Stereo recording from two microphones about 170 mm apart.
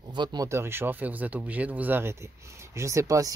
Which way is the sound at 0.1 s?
25° right (ahead or behind).